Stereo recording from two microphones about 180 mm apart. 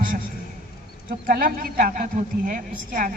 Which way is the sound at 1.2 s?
50° right (ahead or behind).